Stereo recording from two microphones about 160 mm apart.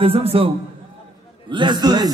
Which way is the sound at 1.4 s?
30° right (ahead or behind).